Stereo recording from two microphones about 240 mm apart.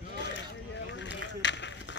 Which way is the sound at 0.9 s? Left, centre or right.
Left.